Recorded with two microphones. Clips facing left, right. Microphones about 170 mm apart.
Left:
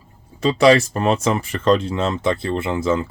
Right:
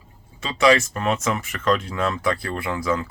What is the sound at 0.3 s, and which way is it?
Speech, 35° left (ahead or behind).